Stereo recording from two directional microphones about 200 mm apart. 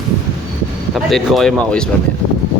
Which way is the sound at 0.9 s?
Centre (ahead or behind).